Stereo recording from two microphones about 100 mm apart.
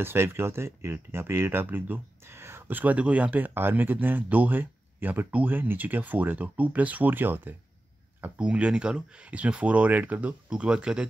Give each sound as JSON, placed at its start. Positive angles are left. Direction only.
{"t": 0.0, "sound": "speech", "side_deg": -20}